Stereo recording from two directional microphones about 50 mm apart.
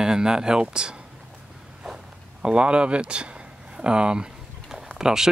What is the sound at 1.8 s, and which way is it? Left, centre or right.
Zipper, centre.